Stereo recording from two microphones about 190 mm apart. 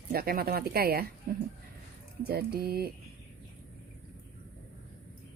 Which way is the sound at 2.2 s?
55° right (ahead or behind).